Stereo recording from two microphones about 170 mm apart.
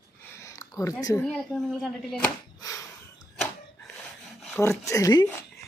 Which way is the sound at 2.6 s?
20° left (ahead or behind).